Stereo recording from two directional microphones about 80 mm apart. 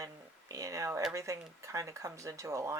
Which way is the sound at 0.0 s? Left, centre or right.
Right.